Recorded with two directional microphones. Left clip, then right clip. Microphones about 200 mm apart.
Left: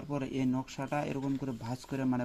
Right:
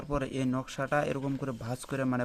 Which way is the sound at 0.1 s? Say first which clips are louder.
Right 2 dB; 20° right (ahead or behind).